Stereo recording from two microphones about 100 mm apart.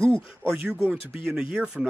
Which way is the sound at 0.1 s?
15° right (ahead or behind).